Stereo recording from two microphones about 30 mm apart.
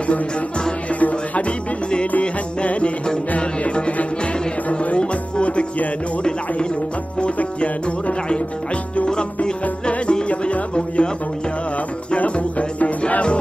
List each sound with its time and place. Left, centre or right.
0.9 s music: left
4.9 s music: left
7.3 s music: left
9.4 s music: left
12.2 s music: left